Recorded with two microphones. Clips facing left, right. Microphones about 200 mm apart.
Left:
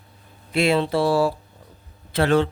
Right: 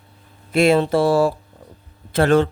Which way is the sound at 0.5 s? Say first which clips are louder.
Right 4 dB; 45° right (ahead or behind).